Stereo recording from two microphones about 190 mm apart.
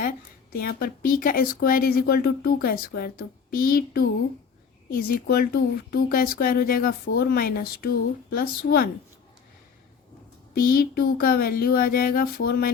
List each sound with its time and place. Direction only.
0.5 s speech: 50° left (ahead or behind)
10.5 s speech: 55° left (ahead or behind)